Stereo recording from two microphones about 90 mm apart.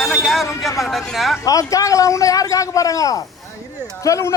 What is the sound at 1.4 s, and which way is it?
A man's voice, 40° left (ahead or behind).